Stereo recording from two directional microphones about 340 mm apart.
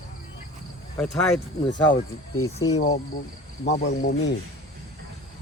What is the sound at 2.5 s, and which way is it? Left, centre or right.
Speech, centre.